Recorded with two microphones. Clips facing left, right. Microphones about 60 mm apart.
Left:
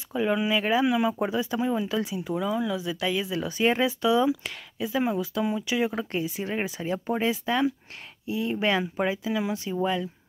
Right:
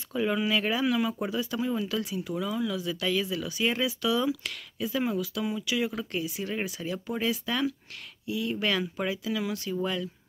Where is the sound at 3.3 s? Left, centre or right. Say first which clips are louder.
Left 4 dB; left.